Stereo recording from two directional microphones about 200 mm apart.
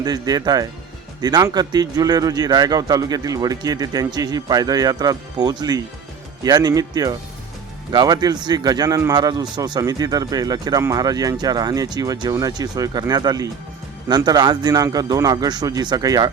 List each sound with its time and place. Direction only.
0.0 s a man's voice: 20° right (ahead or behind)